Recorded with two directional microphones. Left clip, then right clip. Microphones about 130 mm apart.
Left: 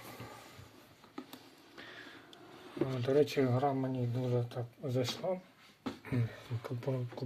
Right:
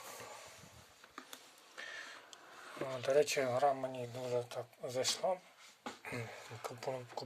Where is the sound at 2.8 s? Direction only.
30° right (ahead or behind).